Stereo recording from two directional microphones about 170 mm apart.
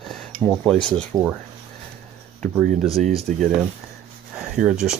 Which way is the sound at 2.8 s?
Centre (ahead or behind).